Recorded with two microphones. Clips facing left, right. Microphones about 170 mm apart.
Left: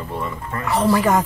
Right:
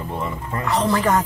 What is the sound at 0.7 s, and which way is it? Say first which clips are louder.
Speech: left 2 dB; 10° left (ahead or behind).